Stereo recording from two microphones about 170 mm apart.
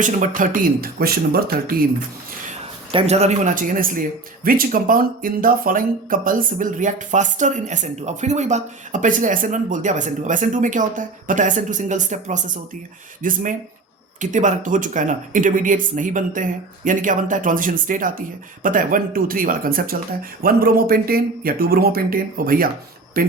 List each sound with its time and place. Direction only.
0.0 s speech: 50° right (ahead or behind)
2.9 s speech: 40° right (ahead or behind); by 23.3 s 55° right (ahead or behind)